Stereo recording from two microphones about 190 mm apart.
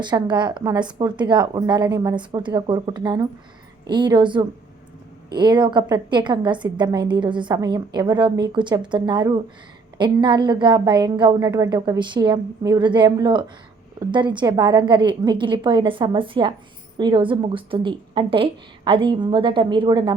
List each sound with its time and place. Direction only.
0.0 s a woman's voice: 25° right (ahead or behind)